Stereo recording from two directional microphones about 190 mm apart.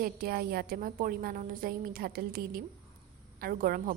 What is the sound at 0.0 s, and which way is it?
A woman's voice, 50° right (ahead or behind).